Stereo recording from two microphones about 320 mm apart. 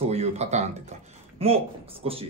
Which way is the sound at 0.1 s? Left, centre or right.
Centre.